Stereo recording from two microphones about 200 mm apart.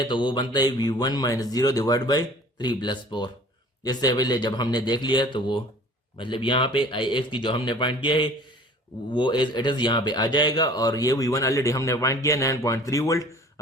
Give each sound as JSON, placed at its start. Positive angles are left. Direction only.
{"t": 0.1, "sound": "speech", "side_deg": 25}